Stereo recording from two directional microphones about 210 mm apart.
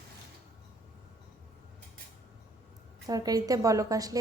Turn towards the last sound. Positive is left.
turn(degrees=-15)  # may be behind; listen again after turning